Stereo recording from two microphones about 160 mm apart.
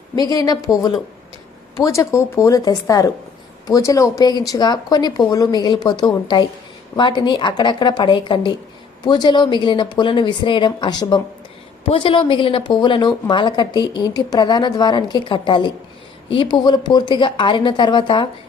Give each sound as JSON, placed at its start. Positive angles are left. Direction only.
{"t": 0.2, "sound": "a woman's voice", "side_deg": 25}
{"t": 1.8, "sound": "a woman's voice", "side_deg": 20}